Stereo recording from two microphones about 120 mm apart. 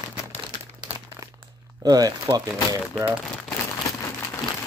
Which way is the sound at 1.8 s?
35° right (ahead or behind).